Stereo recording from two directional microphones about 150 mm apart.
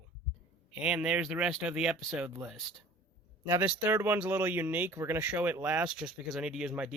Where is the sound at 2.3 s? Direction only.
15° right (ahead or behind).